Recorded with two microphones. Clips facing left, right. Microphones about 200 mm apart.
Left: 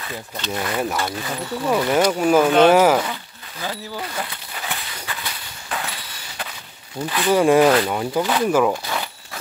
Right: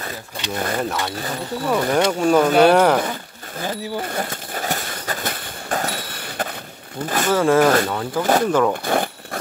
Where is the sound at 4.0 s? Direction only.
50° right (ahead or behind).